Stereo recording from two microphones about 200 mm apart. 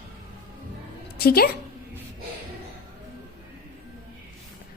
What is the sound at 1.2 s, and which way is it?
Speech, 50° left (ahead or behind).